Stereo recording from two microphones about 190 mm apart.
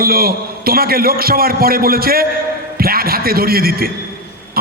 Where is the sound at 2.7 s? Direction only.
50° right (ahead or behind).